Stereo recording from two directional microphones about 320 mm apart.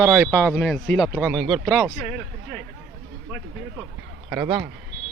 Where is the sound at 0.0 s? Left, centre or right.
Centre.